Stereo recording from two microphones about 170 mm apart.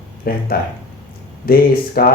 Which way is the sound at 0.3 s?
60° left (ahead or behind).